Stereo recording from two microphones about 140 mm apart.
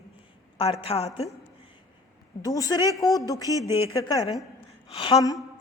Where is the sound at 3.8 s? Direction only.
25° left (ahead or behind).